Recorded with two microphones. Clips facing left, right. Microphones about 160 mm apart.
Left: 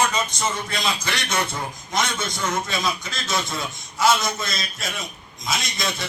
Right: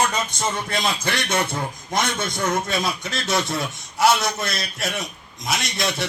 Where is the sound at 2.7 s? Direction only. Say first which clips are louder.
Right 2 dB; 70° right (ahead or behind).